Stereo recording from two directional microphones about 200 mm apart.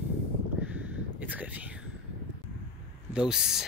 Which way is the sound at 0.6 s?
10° right (ahead or behind).